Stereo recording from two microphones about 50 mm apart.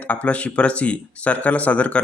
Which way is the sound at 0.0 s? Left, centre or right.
Left.